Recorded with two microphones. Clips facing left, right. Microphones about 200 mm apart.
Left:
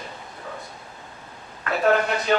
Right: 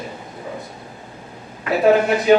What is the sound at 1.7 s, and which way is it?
Speech, 5° right (ahead or behind).